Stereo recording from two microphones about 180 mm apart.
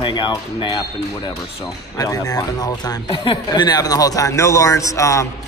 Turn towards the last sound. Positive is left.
turn(degrees=15)  # may be behind; listen again after turning